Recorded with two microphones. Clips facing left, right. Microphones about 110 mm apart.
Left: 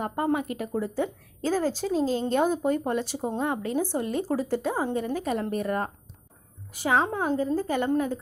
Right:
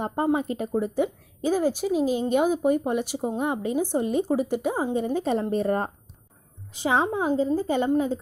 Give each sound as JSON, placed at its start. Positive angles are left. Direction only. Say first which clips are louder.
{"t": 0.3, "sound": "speech", "louder": "right 3 dB", "side_deg": -25}